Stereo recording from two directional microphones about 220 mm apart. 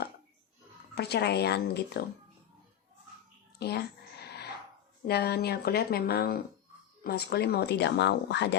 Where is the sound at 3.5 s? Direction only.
50° left (ahead or behind).